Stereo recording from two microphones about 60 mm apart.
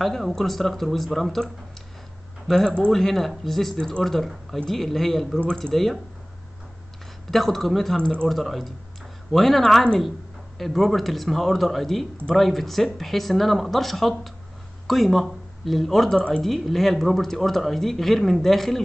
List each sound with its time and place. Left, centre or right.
0.0 s speech: centre
2.4 s speech: centre
7.2 s speech: centre
8.0 s speech: centre
8.3 s speech: centre